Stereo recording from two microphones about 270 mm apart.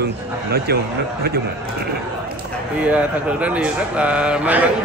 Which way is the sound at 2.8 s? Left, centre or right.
Centre.